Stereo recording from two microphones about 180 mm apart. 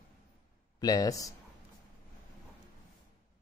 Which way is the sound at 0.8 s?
20° left (ahead or behind).